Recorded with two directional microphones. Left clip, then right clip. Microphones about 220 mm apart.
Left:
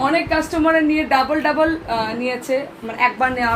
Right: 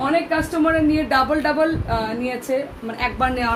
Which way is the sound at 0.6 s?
20° right (ahead or behind).